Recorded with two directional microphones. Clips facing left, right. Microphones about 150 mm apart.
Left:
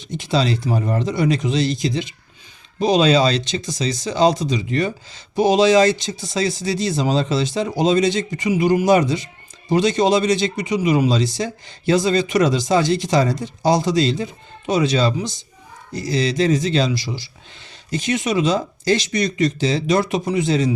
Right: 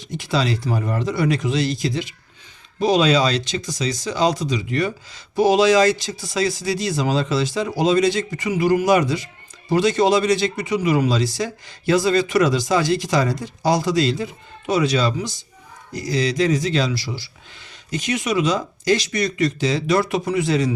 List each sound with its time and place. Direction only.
0.0 s speech: 20° left (ahead or behind)